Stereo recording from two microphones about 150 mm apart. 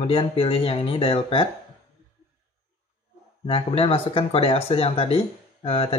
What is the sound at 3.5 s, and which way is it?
Speech, 40° left (ahead or behind).